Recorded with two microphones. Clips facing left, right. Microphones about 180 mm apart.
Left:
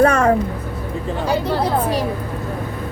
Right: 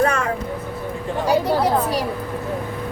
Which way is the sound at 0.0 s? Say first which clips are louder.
Left 5 dB; 45° left (ahead or behind).